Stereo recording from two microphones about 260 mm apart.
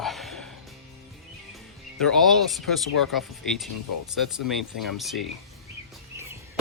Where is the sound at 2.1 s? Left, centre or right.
Centre.